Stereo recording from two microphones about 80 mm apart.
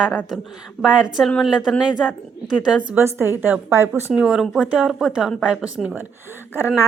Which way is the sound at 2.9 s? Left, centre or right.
Right.